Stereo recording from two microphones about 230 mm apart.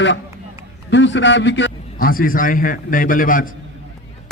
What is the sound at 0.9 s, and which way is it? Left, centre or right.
A man's voice, left.